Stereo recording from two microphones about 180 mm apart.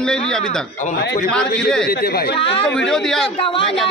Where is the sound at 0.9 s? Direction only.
60° left (ahead or behind).